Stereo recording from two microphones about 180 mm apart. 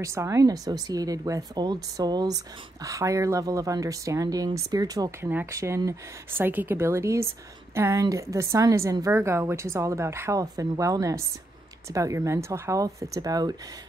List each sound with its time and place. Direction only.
0.0 s speech: 15° right (ahead or behind)